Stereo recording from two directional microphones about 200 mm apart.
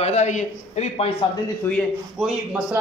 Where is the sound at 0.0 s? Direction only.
35° left (ahead or behind).